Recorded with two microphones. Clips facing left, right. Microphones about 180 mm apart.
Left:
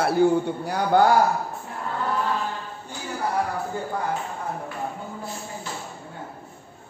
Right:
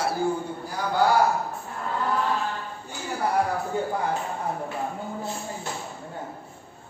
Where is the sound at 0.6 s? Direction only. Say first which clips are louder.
Left 7 dB; 70° left (ahead or behind).